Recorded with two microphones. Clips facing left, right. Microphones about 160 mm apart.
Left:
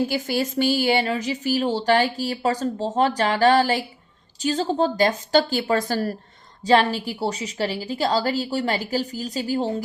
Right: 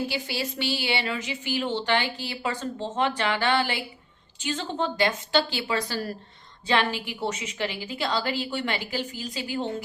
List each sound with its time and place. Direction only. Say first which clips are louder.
0.1 s a woman's voice: left 7 dB; 45° left (ahead or behind)